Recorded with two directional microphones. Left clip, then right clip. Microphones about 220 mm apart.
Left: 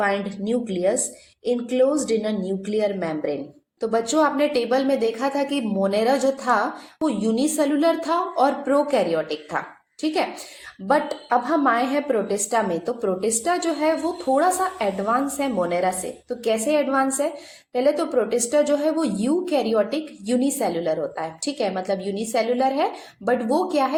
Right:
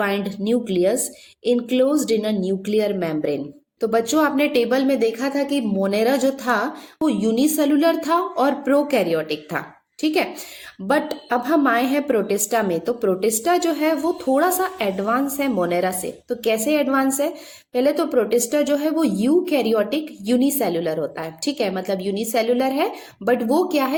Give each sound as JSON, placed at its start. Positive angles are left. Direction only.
{"t": 0.0, "sound": "a woman's voice", "side_deg": -40}